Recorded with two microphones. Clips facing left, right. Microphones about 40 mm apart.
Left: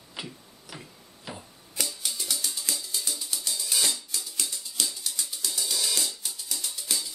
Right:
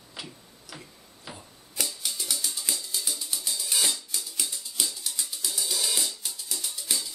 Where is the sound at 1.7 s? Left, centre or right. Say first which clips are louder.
Even; centre.